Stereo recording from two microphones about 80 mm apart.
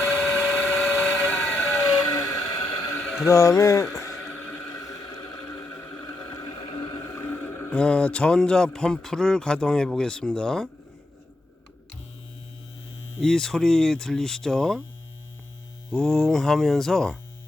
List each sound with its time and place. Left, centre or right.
0.0 s vehicle: centre; by 2.5 s left
2.5 s a sound: left
2.9 s a sound: centre
3.2 s speech: left
3.9 s a sound: left
5.7 s a sound: left
6.3 s vehicle: left
6.7 s boat: left
7.1 s boat: left
7.7 s speech: centre
13.2 s speech: centre
15.9 s speech: centre